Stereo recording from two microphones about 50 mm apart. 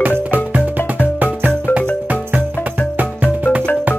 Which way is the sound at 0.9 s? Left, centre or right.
Right.